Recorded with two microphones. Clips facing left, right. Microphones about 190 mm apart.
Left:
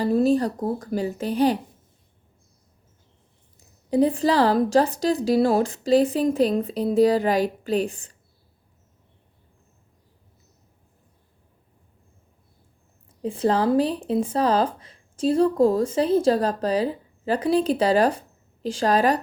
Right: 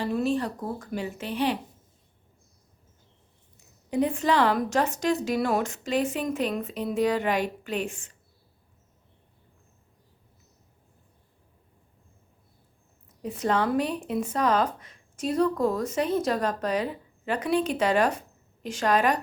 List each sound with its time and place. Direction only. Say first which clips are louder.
0.0 s speech: left 7 dB; 35° left (ahead or behind)
3.6 s speech: left 6 dB; 35° left (ahead or behind)
13.1 s speech: left 5 dB; 30° left (ahead or behind)